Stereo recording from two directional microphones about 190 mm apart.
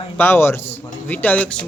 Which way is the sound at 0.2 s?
10° left (ahead or behind).